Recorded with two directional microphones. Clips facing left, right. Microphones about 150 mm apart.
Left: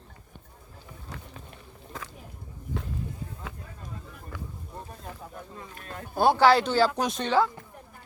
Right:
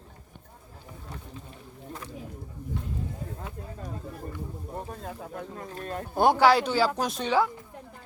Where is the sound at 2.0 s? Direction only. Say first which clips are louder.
Right 3 dB; 90° left.